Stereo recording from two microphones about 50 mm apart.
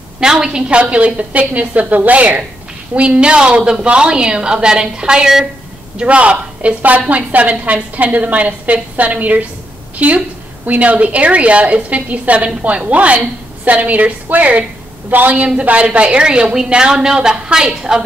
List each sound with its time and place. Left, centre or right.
0.2 s a woman's voice: centre
5.9 s a woman's voice: right